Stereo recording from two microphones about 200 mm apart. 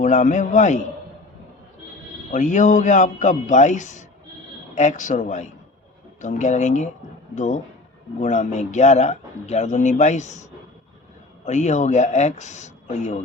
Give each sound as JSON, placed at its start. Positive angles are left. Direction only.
{"t": 0.0, "sound": "a man's voice", "side_deg": 40}
{"t": 2.3, "sound": "a man's voice", "side_deg": 40}
{"t": 11.4, "sound": "a man's voice", "side_deg": 35}